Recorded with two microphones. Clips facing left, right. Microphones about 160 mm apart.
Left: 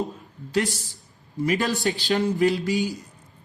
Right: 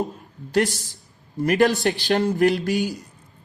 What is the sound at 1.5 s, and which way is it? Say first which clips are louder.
A man's voice: right 5 dB; 65° right (ahead or behind).